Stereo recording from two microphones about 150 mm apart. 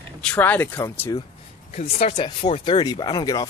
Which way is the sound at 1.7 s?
40° left (ahead or behind).